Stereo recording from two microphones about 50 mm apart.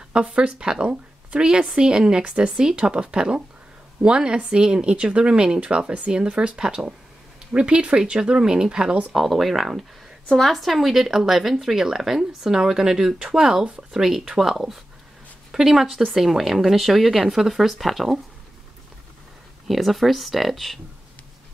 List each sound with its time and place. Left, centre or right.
0.1 s a woman's voice: right
9.1 s speech: centre
10.3 s speech: centre
19.7 s speech: centre